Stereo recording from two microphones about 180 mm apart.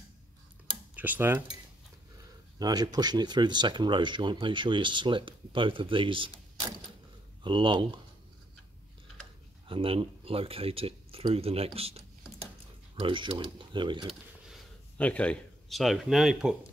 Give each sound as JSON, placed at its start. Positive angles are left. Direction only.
{"t": 0.9, "sound": "speech", "side_deg": -10}
{"t": 2.6, "sound": "speech", "side_deg": -20}
{"t": 7.4, "sound": "speech", "side_deg": -25}
{"t": 9.7, "sound": "speech", "side_deg": -30}
{"t": 13.0, "sound": "speech", "side_deg": -30}
{"t": 14.5, "sound": "speech", "side_deg": 5}